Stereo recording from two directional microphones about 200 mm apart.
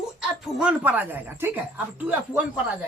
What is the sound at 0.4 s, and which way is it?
Speech, 5° right (ahead or behind).